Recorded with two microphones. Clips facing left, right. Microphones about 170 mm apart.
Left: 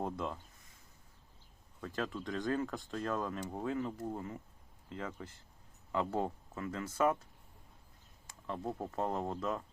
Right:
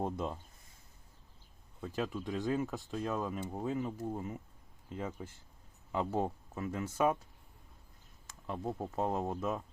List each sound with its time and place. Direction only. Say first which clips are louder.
0.0 s speech: right 2 dB; 20° right (ahead or behind)
1.8 s speech: right 2 dB; 10° right (ahead or behind)
8.4 s speech: right 1 dB; 10° right (ahead or behind)